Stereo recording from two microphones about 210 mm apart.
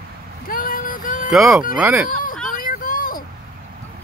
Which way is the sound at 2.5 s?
40° left (ahead or behind).